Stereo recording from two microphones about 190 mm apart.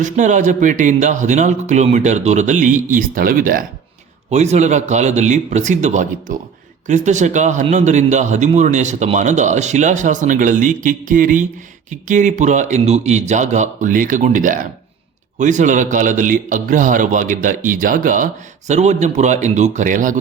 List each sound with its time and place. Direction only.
0.0 s speech: 40° right (ahead or behind)
4.3 s a man's voice: 35° right (ahead or behind)